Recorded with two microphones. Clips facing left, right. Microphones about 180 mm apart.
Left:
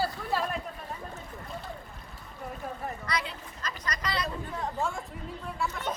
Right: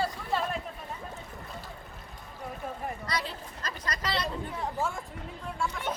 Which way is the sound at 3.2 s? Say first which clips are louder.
Right 1 dB; 35° right (ahead or behind).